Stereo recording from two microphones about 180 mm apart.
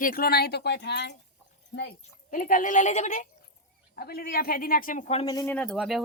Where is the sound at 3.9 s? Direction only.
60° left (ahead or behind); by 5.2 s 40° left (ahead or behind).